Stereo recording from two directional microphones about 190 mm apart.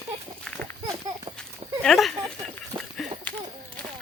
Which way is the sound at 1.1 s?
20° right (ahead or behind).